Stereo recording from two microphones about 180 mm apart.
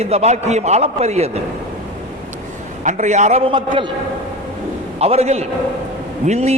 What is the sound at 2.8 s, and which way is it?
A man's voice, 40° right (ahead or behind).